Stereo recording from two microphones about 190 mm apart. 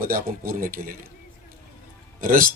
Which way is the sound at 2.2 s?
45° right (ahead or behind).